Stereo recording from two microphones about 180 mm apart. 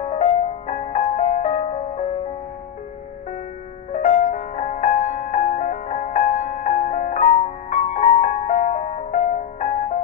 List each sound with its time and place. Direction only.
0.0 s music: 35° left (ahead or behind)
3.9 s music: 45° left (ahead or behind)